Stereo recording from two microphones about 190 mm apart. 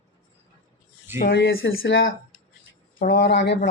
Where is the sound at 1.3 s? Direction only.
80° left.